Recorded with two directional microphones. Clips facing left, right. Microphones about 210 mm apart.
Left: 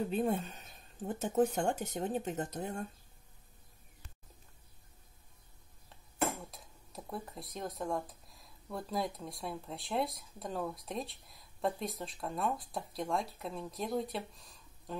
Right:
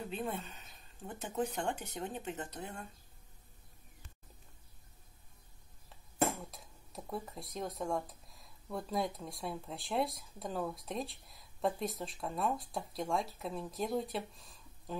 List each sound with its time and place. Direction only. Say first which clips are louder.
0.1 s speech: left 7 dB; 45° left (ahead or behind)
6.5 s speech: even; centre (ahead or behind)